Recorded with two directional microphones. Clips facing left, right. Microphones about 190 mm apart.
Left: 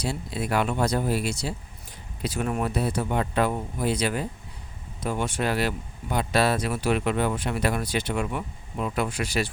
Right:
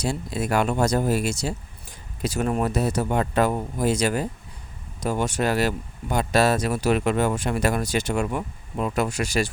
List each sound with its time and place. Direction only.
0.0 s speech: 45° right (ahead or behind)